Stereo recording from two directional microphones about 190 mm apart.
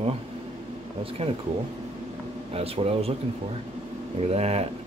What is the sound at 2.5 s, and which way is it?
Speech, 30° right (ahead or behind).